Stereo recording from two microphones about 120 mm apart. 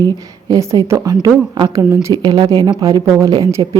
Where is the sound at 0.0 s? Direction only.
35° right (ahead or behind).